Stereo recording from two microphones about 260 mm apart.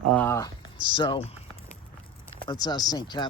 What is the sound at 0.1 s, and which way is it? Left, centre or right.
Speech, centre.